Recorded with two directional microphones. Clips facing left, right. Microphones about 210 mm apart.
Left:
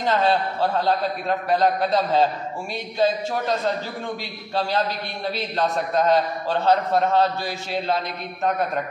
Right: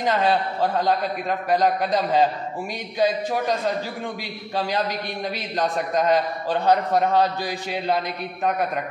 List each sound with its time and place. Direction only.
0.0 s a man's voice: 15° right (ahead or behind)